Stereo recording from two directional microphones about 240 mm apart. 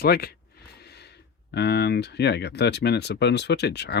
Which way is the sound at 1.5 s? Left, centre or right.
Left.